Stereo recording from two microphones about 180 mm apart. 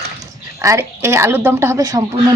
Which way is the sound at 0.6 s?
15° right (ahead or behind).